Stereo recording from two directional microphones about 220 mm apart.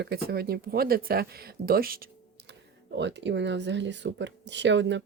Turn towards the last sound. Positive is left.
turn(degrees=-55)  # may be behind; listen again after turning